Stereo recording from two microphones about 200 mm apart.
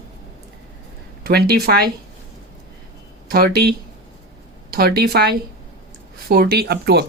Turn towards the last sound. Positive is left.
turn(degrees=-55)  # may be behind; listen again after turning